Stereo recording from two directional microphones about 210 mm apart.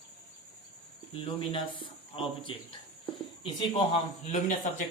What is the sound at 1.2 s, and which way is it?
Speech, 25° left (ahead or behind).